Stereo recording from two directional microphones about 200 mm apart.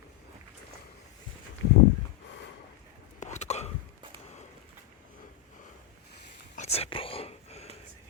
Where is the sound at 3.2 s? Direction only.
35° left (ahead or behind).